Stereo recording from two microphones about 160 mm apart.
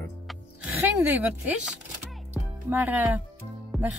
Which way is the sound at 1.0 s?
10° right (ahead or behind).